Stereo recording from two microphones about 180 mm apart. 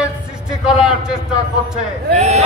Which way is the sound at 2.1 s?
40° right (ahead or behind).